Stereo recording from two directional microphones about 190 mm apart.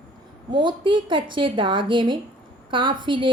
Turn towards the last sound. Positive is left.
turn(degrees=-25)  # may be behind; listen again after turning